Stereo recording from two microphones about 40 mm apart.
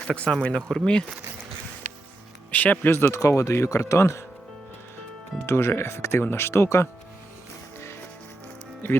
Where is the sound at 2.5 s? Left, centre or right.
Left.